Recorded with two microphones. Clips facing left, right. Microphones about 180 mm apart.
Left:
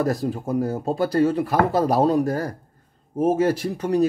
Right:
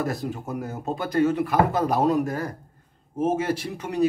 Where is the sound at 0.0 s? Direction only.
35° left (ahead or behind).